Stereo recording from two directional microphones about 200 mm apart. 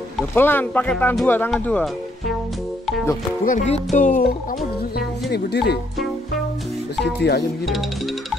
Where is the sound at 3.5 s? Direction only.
35° left (ahead or behind).